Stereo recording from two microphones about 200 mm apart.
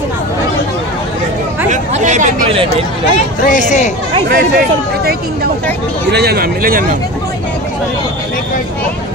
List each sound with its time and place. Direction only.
1.7 s speech: 35° right (ahead or behind)
3.4 s speech: 40° left (ahead or behind)
4.3 s speech: 45° right (ahead or behind)